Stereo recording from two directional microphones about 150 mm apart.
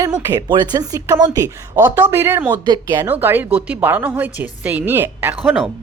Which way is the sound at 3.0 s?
15° right (ahead or behind).